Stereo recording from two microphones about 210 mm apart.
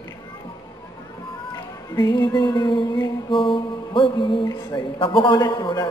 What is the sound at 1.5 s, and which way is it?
Music, 20° left (ahead or behind).